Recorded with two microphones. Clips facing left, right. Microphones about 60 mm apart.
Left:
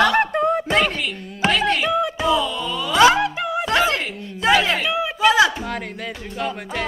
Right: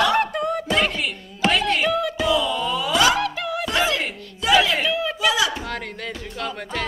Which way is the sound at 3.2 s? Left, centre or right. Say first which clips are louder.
Left 3 dB; left.